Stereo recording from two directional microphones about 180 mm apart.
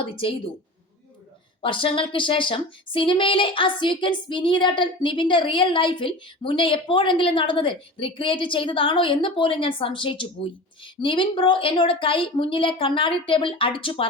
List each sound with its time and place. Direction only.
1.6 s speech: 30° left (ahead or behind)